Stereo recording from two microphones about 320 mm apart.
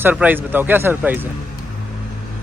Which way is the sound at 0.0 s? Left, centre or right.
Centre.